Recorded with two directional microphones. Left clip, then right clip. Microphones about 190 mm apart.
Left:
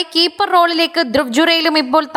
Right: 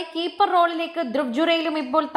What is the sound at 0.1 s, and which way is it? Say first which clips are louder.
A woman's voice: left 6 dB; 35° left (ahead or behind).